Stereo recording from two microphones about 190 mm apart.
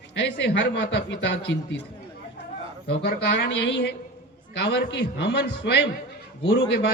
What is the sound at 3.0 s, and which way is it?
A man's voice, 65° left (ahead or behind).